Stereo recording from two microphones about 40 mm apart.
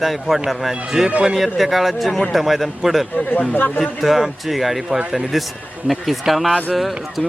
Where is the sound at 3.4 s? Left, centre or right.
Left.